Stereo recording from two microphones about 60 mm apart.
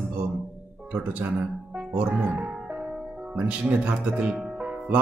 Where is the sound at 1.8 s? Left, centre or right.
Right.